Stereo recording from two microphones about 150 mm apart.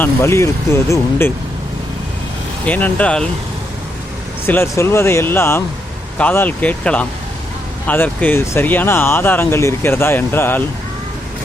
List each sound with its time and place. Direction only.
0.0 s speech: 20° left (ahead or behind)
2.6 s speech: 10° left (ahead or behind)
4.4 s speech: 15° left (ahead or behind)